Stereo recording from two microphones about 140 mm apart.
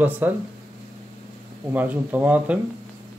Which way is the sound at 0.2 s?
15° right (ahead or behind).